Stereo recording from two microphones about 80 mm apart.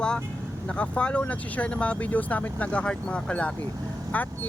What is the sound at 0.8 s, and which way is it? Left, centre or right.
Speech, centre.